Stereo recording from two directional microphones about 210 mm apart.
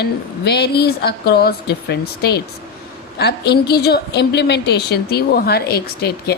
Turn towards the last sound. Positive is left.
turn(degrees=50)  # may be behind; listen again after turning